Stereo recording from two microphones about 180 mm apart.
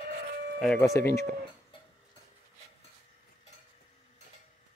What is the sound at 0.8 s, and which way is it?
Speech, 15° left (ahead or behind).